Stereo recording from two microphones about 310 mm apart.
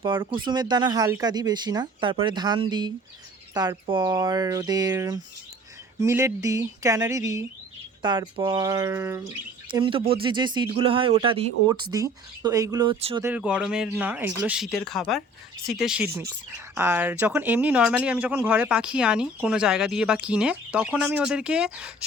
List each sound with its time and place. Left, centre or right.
0.0 s speech: centre
13.2 s speech: centre